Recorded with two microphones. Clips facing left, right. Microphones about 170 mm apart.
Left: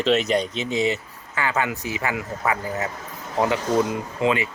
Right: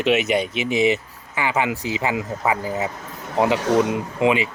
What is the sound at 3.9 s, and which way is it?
Speech, 15° right (ahead or behind).